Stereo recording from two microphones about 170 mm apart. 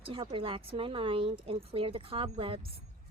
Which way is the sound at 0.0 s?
30° right (ahead or behind).